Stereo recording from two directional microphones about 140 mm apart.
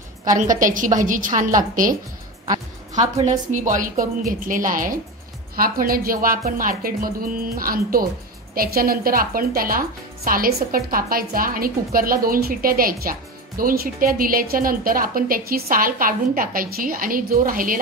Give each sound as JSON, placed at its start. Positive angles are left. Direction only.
{"t": 0.2, "sound": "a woman's voice", "side_deg": -70}
{"t": 2.9, "sound": "a woman's voice", "side_deg": -55}
{"t": 5.6, "sound": "speech", "side_deg": -90}